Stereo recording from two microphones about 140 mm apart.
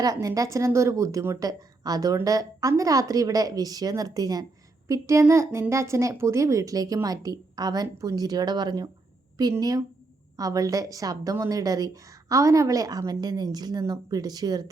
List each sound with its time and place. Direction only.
0.0 s a woman's voice: 25° right (ahead or behind)